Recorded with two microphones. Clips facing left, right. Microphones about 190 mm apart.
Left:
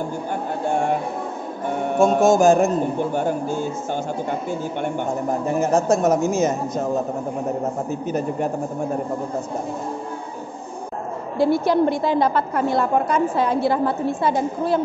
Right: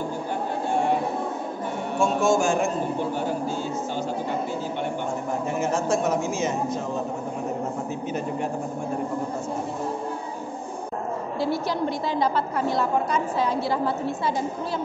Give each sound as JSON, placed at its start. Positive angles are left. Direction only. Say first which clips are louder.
{"t": 2.0, "sound": "a man's voice", "louder": "left 6 dB", "side_deg": 40}
{"t": 5.5, "sound": "a man's voice", "louder": "left 6 dB", "side_deg": 40}
{"t": 7.9, "sound": "a man's voice", "louder": "left 4 dB", "side_deg": 40}
{"t": 11.3, "sound": "a woman's voice", "louder": "left 9 dB", "side_deg": 55}